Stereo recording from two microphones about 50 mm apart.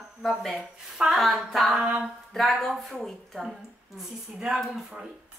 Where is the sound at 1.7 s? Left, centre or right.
Right.